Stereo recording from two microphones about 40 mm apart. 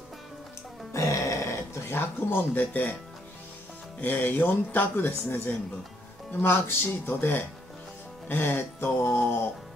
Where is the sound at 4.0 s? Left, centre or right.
Left.